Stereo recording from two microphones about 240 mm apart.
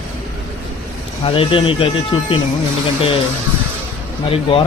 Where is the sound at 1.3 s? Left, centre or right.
Left.